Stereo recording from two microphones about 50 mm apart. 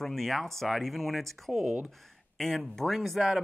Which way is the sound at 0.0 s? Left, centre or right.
Centre.